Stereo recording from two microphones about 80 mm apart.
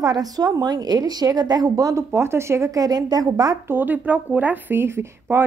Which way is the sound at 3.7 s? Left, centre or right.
Right.